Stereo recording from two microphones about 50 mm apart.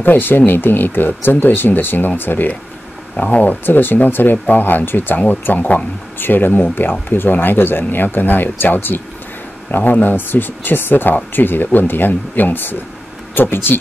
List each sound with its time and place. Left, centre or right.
0.0 s speech: left